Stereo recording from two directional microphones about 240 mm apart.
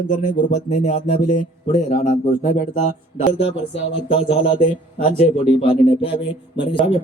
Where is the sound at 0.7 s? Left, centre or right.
Left.